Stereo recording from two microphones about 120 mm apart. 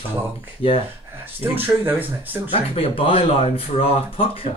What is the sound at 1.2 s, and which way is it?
Speech, 15° right (ahead or behind).